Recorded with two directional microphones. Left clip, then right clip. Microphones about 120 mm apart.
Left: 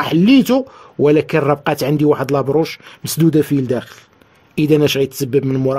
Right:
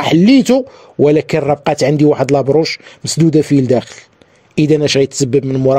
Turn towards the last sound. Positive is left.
turn(degrees=-5)  # may be behind; listen again after turning